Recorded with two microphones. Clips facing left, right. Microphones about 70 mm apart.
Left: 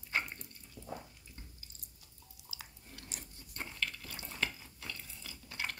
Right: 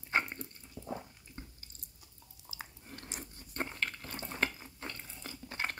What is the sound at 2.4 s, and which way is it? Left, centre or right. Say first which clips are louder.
Drip: right 5 dB; right.